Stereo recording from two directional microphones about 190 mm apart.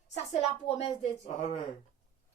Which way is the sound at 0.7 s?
35° left (ahead or behind).